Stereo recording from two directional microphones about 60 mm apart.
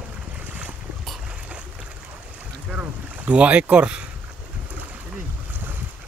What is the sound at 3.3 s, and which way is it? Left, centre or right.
Speech, centre.